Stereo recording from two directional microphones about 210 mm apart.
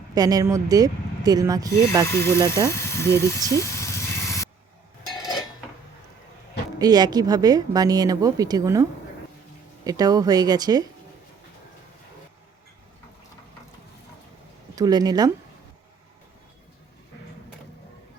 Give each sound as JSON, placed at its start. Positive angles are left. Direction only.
{"t": 0.1, "sound": "a woman's voice", "side_deg": -20}
{"t": 2.0, "sound": "speech", "side_deg": 10}
{"t": 2.6, "sound": "vehicle", "side_deg": 10}
{"t": 6.7, "sound": "a woman's voice", "side_deg": -20}
{"t": 14.8, "sound": "speech", "side_deg": -20}